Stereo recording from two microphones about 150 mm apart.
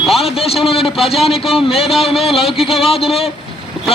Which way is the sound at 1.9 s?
Centre (ahead or behind).